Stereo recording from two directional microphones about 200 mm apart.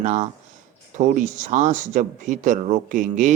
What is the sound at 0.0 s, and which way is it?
Speech, 35° right (ahead or behind).